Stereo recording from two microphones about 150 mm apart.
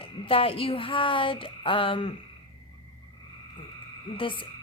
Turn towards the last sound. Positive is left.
turn(degrees=35)  # may be behind; listen again after turning